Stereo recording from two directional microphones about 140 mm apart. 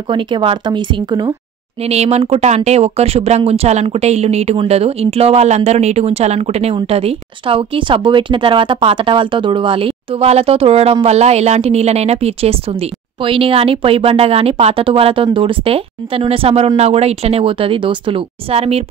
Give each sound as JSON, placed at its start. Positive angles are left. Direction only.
{"t": 0.1, "sound": "speech", "side_deg": -35}
{"t": 1.8, "sound": "speech", "side_deg": -50}